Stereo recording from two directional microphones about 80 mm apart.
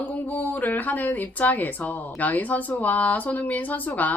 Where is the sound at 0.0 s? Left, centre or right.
Left.